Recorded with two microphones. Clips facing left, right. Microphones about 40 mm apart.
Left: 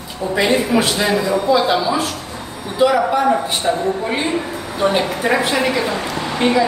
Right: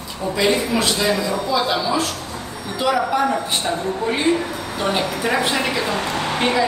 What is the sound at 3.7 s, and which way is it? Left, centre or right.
A woman's voice, centre.